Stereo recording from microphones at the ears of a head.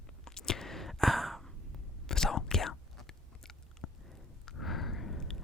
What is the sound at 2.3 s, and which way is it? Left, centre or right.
Whispering, left.